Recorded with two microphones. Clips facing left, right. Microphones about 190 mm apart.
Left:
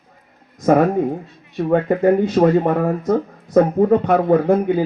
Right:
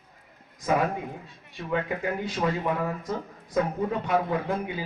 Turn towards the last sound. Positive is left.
turn(degrees=50)  # may be behind; listen again after turning